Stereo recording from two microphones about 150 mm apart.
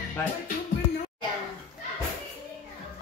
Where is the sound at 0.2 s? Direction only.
15° left (ahead or behind).